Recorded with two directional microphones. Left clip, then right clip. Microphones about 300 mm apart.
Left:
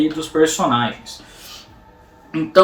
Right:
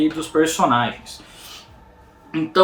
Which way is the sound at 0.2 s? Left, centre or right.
Centre.